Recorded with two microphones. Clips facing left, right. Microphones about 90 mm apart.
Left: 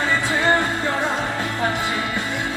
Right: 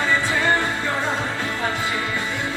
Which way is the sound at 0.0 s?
20° left (ahead or behind).